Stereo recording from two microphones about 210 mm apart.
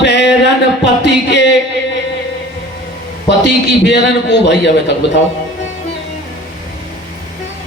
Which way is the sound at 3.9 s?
55° left (ahead or behind).